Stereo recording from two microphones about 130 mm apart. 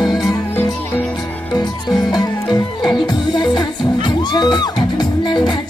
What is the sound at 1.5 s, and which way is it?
Music, 30° left (ahead or behind).